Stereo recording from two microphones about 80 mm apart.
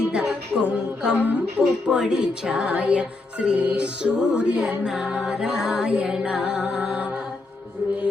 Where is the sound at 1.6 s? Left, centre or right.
Centre.